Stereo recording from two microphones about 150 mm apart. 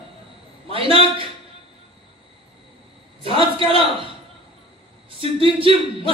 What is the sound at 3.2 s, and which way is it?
Speech, 35° right (ahead or behind).